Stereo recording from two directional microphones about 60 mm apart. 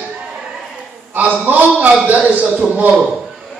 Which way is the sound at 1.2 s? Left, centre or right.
Right.